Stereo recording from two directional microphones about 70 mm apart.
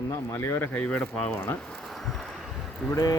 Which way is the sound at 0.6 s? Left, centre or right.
Left.